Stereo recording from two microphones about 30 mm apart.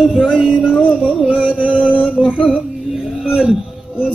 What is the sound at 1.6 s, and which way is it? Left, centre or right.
Music, right.